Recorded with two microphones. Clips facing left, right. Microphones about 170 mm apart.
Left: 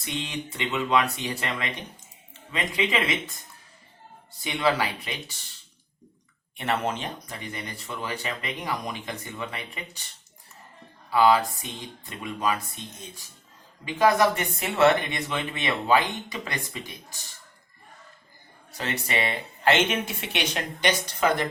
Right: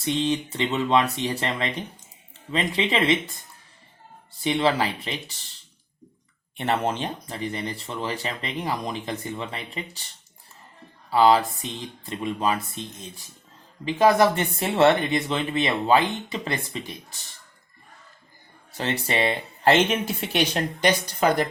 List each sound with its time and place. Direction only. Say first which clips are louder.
0.0 s speech: right 9 dB; 30° right (ahead or behind)
4.4 s speech: right 3 dB; 25° right (ahead or behind)
6.6 s speech: right 3 dB; 30° right (ahead or behind)
11.1 s speech: right 2 dB; 30° right (ahead or behind)
13.8 s speech: right 3 dB; 30° right (ahead or behind)
18.8 s speech: right 4 dB; 30° right (ahead or behind)